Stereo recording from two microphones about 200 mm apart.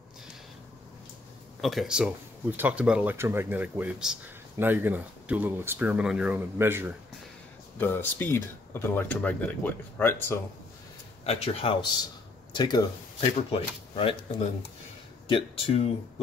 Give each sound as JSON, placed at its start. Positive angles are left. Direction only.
{"t": 1.6, "sound": "speech", "side_deg": 0}
{"t": 7.7, "sound": "speech", "side_deg": 10}
{"t": 11.2, "sound": "speech", "side_deg": 30}
{"t": 15.2, "sound": "speech", "side_deg": 25}